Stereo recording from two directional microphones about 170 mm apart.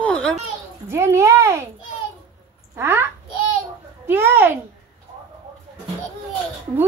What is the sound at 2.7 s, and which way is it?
Speech, 15° right (ahead or behind).